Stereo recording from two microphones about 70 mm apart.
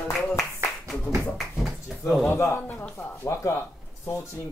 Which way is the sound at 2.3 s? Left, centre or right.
Left.